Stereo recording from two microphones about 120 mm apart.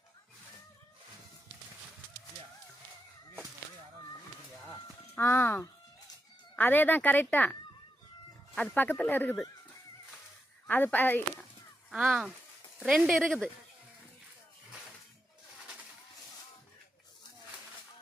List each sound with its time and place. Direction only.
5.1 s speech: 20° left (ahead or behind)
8.5 s speech: 15° left (ahead or behind)
10.7 s speech: 15° left (ahead or behind)
11.9 s speech: 5° right (ahead or behind)